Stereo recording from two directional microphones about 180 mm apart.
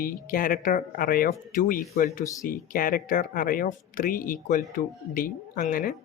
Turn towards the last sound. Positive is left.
turn(degrees=50)  # may be behind; listen again after turning